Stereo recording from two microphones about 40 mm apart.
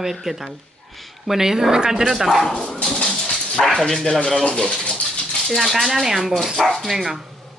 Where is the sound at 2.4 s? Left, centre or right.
Centre.